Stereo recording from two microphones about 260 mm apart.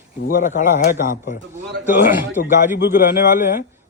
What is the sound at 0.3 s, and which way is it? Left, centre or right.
A man's voice, left.